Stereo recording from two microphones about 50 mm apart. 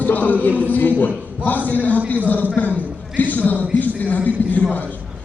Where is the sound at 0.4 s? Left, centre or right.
Left.